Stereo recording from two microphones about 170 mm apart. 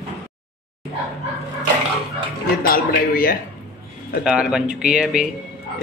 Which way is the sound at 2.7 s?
60° left (ahead or behind).